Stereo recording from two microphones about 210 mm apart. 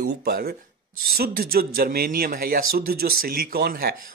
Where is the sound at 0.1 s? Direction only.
50° right (ahead or behind).